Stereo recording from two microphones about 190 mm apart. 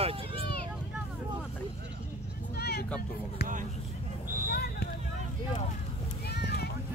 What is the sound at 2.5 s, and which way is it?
Vehicle, 55° left (ahead or behind).